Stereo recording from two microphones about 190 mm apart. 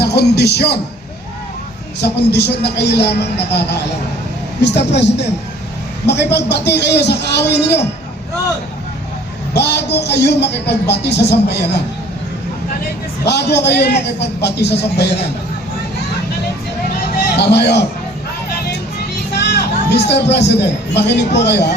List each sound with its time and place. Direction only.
0.0 s music: 60° left (ahead or behind)
2.0 s speech: 60° left (ahead or behind)
6.3 s speech: 60° left (ahead or behind)
9.6 s speech: 60° left (ahead or behind)
13.2 s speech: 60° left (ahead or behind)
17.3 s speech: 60° left (ahead or behind)
19.4 s a sound: 60° left (ahead or behind)
20.3 s speech: 65° left (ahead or behind)